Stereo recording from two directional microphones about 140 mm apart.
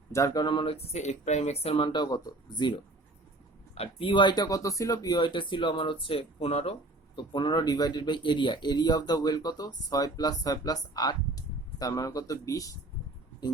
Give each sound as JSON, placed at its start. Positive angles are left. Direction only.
{"t": 0.1, "sound": "speech", "side_deg": 25}
{"t": 7.2, "sound": "speech", "side_deg": 30}